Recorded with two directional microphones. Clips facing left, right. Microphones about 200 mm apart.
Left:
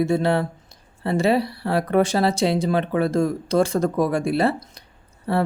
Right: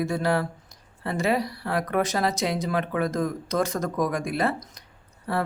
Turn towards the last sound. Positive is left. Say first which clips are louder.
# left 5 dB
turn(degrees=30)  # may be behind; listen again after turning